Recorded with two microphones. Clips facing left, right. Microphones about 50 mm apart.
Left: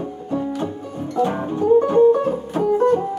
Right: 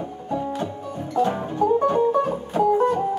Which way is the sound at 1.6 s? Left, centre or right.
Centre.